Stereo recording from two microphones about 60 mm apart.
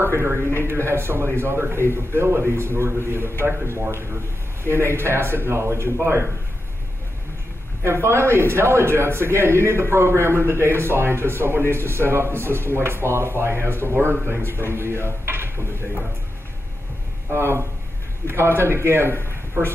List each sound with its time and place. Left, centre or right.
0.0 s a man's voice: right
7.8 s a man's voice: right
17.3 s a man's voice: right